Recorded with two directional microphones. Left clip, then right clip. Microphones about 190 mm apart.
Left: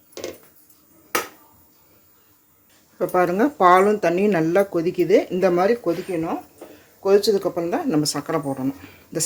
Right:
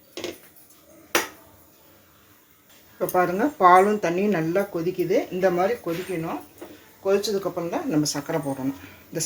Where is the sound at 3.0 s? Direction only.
40° left (ahead or behind); by 5.7 s 60° left (ahead or behind).